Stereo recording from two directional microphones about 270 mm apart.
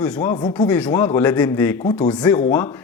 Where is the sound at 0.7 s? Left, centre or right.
Centre.